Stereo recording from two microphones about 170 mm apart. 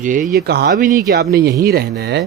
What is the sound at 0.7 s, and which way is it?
Speech, 55° right (ahead or behind).